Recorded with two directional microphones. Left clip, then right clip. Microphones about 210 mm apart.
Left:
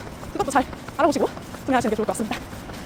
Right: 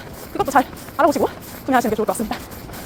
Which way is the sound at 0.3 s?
20° right (ahead or behind).